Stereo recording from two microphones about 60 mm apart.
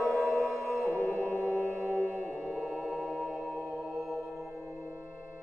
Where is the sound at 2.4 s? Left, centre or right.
Centre.